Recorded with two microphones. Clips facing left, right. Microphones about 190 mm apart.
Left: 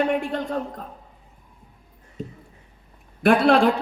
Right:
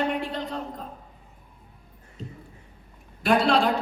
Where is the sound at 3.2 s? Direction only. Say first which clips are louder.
Left 4 dB; 55° left (ahead or behind).